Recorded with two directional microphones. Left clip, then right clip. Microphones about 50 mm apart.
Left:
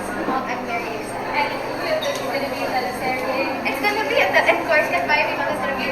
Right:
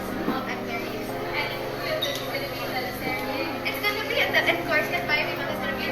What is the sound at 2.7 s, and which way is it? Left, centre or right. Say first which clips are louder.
Chatter: left 6 dB; right.